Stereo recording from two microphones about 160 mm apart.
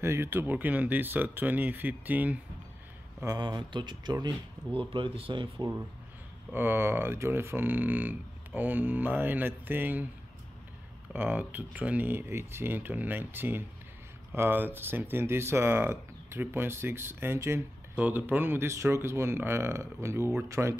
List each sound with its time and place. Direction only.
0.0 s speech: 15° right (ahead or behind)
3.3 s speech: 25° right (ahead or behind)
6.5 s speech: 15° right (ahead or behind)
11.1 s speech: 10° right (ahead or behind)